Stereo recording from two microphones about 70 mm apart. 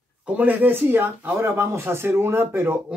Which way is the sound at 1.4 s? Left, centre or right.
Right.